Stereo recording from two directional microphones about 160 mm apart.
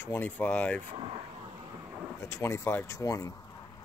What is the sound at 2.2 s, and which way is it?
Speech, 15° left (ahead or behind).